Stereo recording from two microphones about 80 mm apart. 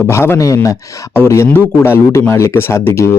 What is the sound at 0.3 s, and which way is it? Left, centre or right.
Speech, left.